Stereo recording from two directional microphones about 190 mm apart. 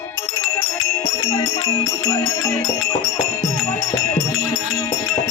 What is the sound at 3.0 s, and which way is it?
Speech, 15° left (ahead or behind).